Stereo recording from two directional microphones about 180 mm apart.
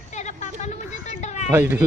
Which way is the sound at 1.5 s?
10° right (ahead or behind).